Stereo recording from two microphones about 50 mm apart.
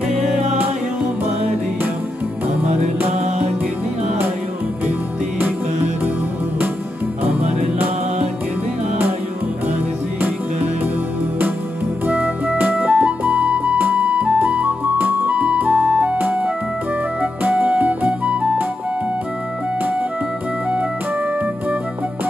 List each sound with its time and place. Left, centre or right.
12.1 s music: centre
12.9 s music: right